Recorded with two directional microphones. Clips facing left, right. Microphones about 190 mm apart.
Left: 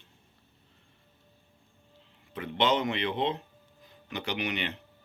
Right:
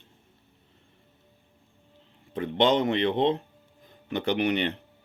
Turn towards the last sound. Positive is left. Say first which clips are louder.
# right 8 dB
turn(degrees=-55)  # may be behind; listen again after turning